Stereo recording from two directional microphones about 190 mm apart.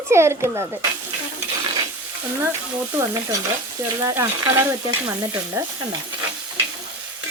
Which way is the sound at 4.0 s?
10° right (ahead or behind).